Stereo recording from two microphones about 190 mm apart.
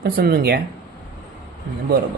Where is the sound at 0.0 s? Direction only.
55° right (ahead or behind).